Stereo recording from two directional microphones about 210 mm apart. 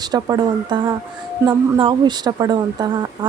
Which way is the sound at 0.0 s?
20° right (ahead or behind).